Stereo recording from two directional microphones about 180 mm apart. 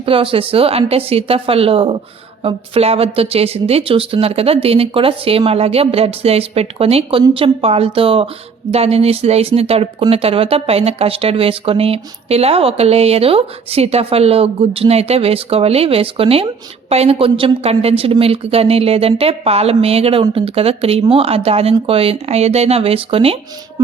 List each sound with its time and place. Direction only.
0.0 s speech: 30° right (ahead or behind)